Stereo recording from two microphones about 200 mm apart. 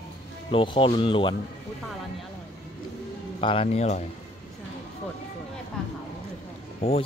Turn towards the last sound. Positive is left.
turn(degrees=30)  # may be behind; listen again after turning